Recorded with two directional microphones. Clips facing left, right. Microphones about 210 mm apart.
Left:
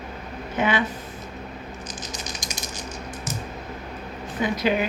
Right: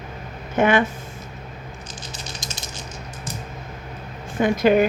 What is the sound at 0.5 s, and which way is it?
Speech, 50° right (ahead or behind).